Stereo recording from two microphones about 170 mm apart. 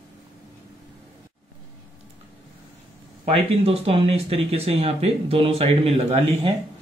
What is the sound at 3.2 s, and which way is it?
Speech, 35° right (ahead or behind).